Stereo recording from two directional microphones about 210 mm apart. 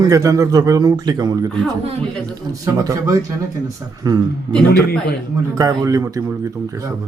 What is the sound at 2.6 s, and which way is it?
Speech, 15° right (ahead or behind).